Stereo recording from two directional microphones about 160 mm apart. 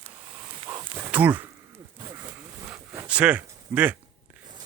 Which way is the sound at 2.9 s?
10° right (ahead or behind).